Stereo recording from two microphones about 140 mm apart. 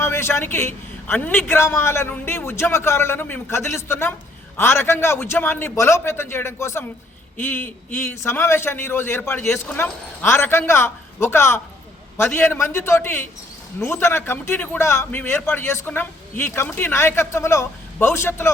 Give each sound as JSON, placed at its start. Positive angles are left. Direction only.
{"t": 0.0, "sound": "a man's voice", "side_deg": 15}